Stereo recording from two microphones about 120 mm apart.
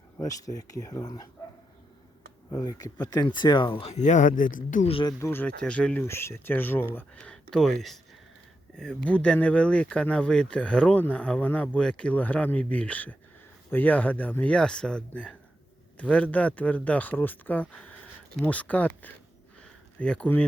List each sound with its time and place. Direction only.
0.2 s speech: 30° left (ahead or behind)
2.5 s speech: 30° left (ahead or behind); by 3.9 s 45° left (ahead or behind)
3.9 s speech: 90° left
5.2 s speech: 15° left (ahead or behind)
6.1 s speech: 20° left (ahead or behind)
19.6 s a sound: 10° left (ahead or behind)